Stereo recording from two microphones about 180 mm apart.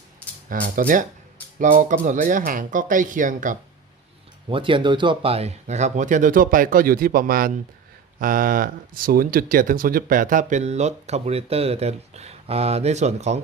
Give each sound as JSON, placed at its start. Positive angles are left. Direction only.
{"t": 0.5, "sound": "speech", "side_deg": -50}
{"t": 4.4, "sound": "speech", "side_deg": -30}